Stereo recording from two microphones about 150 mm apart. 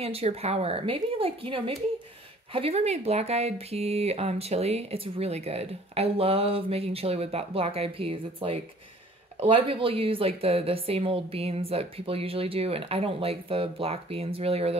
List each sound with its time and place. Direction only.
0.0 s speech: 40° right (ahead or behind)